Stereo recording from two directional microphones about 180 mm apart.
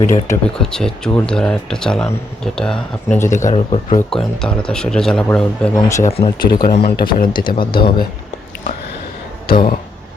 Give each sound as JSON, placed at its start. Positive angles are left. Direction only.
{"t": 0.0, "sound": "speech", "side_deg": 15}
{"t": 0.6, "sound": "speech", "side_deg": 5}
{"t": 3.2, "sound": "speech", "side_deg": 45}
{"t": 4.1, "sound": "speech", "side_deg": 5}
{"t": 5.7, "sound": "speech", "side_deg": 15}
{"t": 6.1, "sound": "speech", "side_deg": 35}
{"t": 6.9, "sound": "speech", "side_deg": 55}
{"t": 7.3, "sound": "speech", "side_deg": 25}
{"t": 9.5, "sound": "speech", "side_deg": 55}